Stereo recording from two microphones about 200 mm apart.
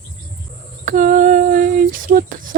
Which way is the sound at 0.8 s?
40° right (ahead or behind).